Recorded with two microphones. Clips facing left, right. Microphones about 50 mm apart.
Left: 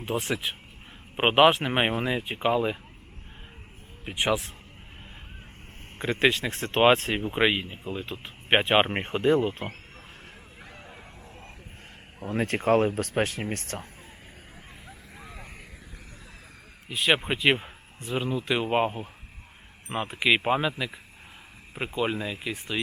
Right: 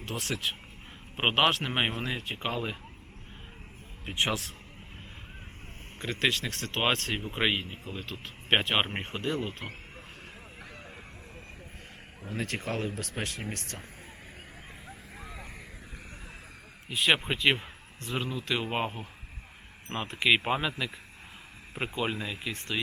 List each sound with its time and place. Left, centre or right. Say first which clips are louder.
0.0 s speech: left 5 dB; centre
4.2 s speech: left 4 dB; centre
6.0 s speech: left 5 dB; left
10.6 s a sound: left 1 dB; centre
12.2 s speech: left 8 dB; left
15.2 s vehicle: even; centre
16.9 s speech: left 2 dB; centre